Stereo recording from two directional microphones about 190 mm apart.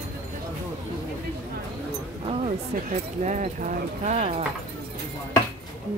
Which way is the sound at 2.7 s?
45° right (ahead or behind).